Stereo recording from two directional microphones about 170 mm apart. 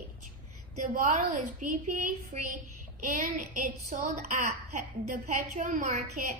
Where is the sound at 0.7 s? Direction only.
50° right (ahead or behind).